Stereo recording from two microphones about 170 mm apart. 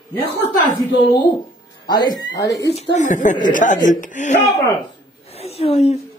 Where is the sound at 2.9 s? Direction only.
45° left (ahead or behind).